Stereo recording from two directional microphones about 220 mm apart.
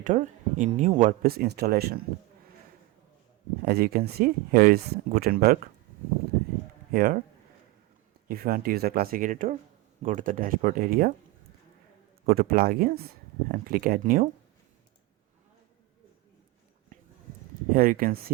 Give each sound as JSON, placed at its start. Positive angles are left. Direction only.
{"t": 0.0, "sound": "speech", "side_deg": -35}
{"t": 3.6, "sound": "speech", "side_deg": -45}
{"t": 6.9, "sound": "speech", "side_deg": -40}
{"t": 8.3, "sound": "speech", "side_deg": -40}
{"t": 12.2, "sound": "speech", "side_deg": -45}
{"t": 17.7, "sound": "speech", "side_deg": -40}